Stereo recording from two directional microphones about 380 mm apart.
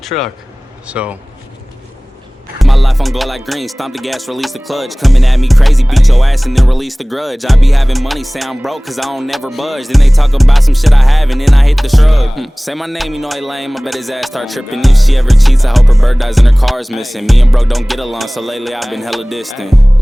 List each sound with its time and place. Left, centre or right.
0.1 s speech: left
0.9 s music: centre
2.6 s music: centre